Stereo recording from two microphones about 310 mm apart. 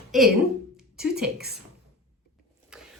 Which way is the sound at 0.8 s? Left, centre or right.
Centre.